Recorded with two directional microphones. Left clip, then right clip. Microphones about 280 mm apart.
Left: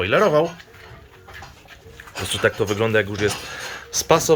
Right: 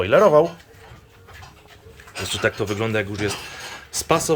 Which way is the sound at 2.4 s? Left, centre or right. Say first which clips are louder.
Left 3 dB; centre.